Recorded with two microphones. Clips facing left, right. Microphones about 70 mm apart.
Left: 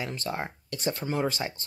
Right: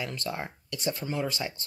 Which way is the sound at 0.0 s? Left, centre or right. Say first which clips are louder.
Left 1 dB; left.